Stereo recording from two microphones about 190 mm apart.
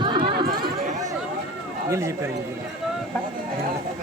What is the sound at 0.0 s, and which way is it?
Chatter, 25° right (ahead or behind).